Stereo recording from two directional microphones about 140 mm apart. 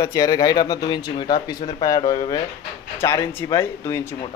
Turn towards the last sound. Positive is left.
turn(degrees=15)  # may be behind; listen again after turning